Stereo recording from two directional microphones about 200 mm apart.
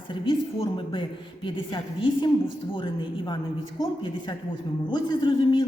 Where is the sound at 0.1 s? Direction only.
25° left (ahead or behind).